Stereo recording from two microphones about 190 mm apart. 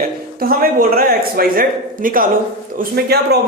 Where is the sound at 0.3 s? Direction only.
50° right (ahead or behind).